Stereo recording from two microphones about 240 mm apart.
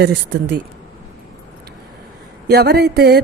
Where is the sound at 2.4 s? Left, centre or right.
Right.